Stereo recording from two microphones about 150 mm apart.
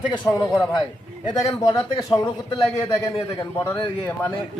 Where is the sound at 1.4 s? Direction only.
25° left (ahead or behind).